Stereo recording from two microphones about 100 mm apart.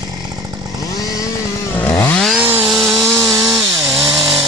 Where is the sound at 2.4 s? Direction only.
20° right (ahead or behind).